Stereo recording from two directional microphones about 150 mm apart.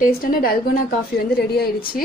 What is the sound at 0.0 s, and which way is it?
Speech, 75° left (ahead or behind).